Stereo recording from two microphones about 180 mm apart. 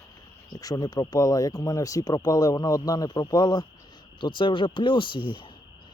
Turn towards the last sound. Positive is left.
turn(degrees=25)  # may be behind; listen again after turning